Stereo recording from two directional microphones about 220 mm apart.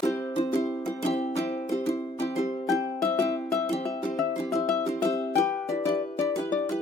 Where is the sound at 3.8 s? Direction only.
Centre (ahead or behind).